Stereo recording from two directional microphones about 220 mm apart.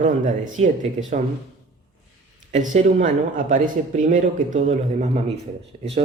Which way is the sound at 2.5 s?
35° right (ahead or behind).